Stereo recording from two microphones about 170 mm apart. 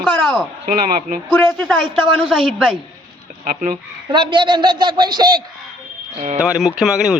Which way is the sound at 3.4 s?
50° right (ahead or behind).